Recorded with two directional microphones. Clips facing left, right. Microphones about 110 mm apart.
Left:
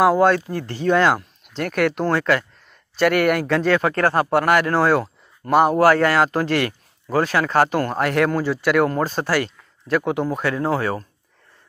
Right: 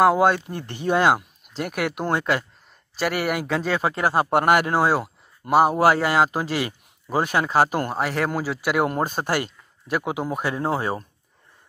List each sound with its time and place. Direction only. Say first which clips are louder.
0.0 s speech: left 2 dB; 5° right (ahead or behind)
3.0 s speech: left 7 dB; 5° right (ahead or behind)